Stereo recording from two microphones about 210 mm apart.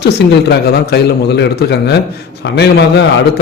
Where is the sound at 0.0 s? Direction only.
50° left (ahead or behind).